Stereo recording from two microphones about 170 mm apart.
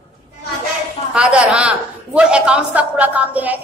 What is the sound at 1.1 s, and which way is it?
A man's voice, 5° right (ahead or behind).